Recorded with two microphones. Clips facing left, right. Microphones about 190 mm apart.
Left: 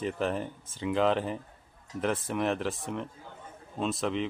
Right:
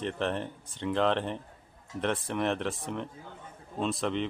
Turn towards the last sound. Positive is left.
turn(degrees=0)  # may be behind; listen again after turning